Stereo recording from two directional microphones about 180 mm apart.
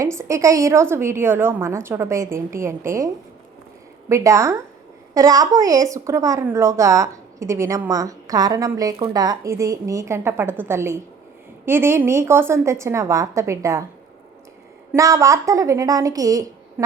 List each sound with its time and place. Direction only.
0.0 s speech: 15° right (ahead or behind)
4.1 s speech: 15° right (ahead or behind)
14.9 s speech: 15° right (ahead or behind)